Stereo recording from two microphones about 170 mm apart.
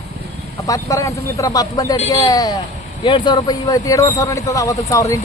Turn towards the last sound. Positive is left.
turn(degrees=20)  # may be behind; listen again after turning